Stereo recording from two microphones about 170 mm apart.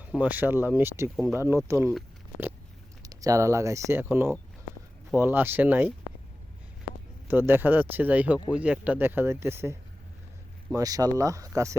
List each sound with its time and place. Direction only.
0.0 s speech: 10° right (ahead or behind)
3.0 s speech: 20° right (ahead or behind)
7.3 s speech: 10° right (ahead or behind)